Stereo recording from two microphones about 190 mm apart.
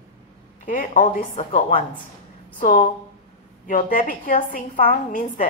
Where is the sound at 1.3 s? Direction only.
30° left (ahead or behind).